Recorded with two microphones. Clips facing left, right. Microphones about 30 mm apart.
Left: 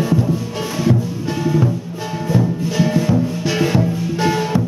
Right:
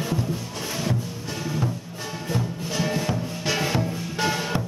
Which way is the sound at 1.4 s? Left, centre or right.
Centre.